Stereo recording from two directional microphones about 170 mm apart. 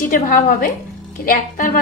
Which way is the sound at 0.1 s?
55° left (ahead or behind).